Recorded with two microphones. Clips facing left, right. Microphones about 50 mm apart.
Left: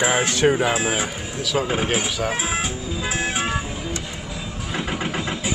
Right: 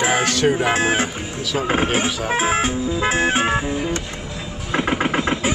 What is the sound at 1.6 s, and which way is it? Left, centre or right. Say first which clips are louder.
Music: right 4 dB; right.